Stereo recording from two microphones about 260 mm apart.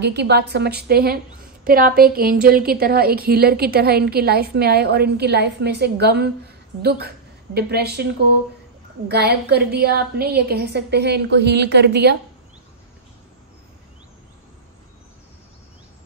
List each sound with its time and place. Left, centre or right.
0.0 s a woman's voice: right
9.1 s a woman's voice: right